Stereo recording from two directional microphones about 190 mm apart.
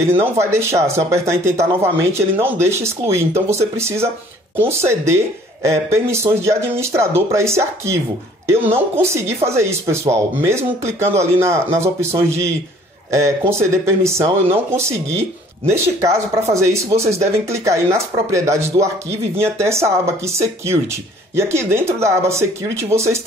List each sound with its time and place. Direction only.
0.0 s speech: 15° right (ahead or behind)